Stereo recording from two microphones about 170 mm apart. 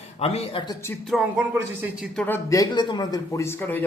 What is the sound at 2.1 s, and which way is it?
A man's voice, 10° left (ahead or behind).